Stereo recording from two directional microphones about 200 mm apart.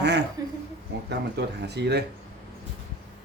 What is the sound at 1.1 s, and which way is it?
Speech, 55° right (ahead or behind).